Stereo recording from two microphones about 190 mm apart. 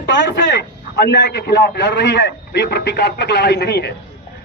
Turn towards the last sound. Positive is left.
turn(degrees=60)  # may be behind; listen again after turning